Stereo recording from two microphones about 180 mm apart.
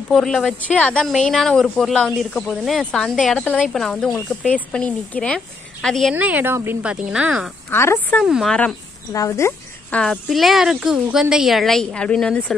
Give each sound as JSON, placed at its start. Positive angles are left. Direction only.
{"t": 0.1, "sound": "speech", "side_deg": 0}
{"t": 6.1, "sound": "a woman's voice", "side_deg": -10}
{"t": 7.7, "sound": "a woman's voice", "side_deg": 15}
{"t": 8.2, "sound": "speech", "side_deg": 0}
{"t": 9.1, "sound": "speech", "side_deg": 15}